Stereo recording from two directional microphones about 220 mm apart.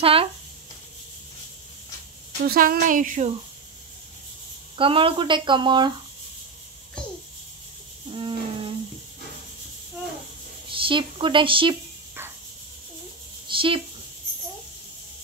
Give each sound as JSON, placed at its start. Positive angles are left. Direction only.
{"t": 0.0, "sound": "speech", "side_deg": -25}
{"t": 2.4, "sound": "speech", "side_deg": -40}
{"t": 4.7, "sound": "speech", "side_deg": -25}
{"t": 8.1, "sound": "music", "side_deg": -25}
{"t": 10.7, "sound": "a woman's voice", "side_deg": -25}
{"t": 13.5, "sound": "a sound", "side_deg": -25}